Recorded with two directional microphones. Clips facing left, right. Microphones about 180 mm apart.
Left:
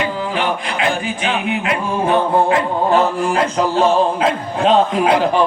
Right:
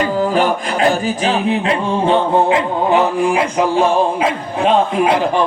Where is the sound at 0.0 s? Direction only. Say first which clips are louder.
Right 5 dB; 40° right (ahead or behind); by 3.4 s 15° right (ahead or behind).